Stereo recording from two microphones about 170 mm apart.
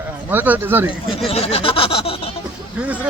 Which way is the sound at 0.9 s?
30° left (ahead or behind).